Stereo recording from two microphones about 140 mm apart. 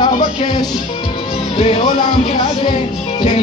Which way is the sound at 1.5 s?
40° left (ahead or behind).